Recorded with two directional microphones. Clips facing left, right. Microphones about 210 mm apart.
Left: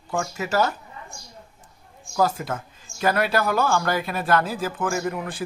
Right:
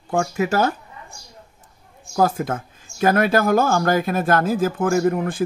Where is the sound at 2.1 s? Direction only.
50° right (ahead or behind).